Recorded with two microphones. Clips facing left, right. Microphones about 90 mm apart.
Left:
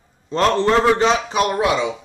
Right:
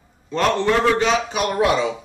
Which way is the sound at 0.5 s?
30° left (ahead or behind).